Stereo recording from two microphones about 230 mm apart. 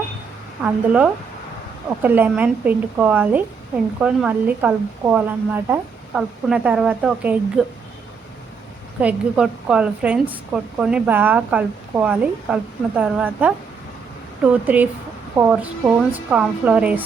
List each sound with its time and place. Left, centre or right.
0.6 s a woman's voice: centre
9.0 s a woman's voice: centre